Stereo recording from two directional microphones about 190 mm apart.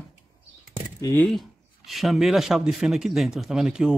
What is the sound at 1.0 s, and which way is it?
Speech, 10° left (ahead or behind).